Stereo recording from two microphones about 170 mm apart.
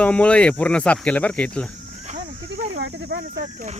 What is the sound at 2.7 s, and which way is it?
Speech, 90° right.